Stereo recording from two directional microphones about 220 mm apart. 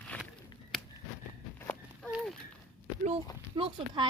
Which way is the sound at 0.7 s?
Centre (ahead or behind).